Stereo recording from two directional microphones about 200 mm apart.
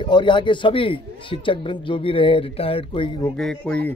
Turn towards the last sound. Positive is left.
turn(degrees=5)  # may be behind; listen again after turning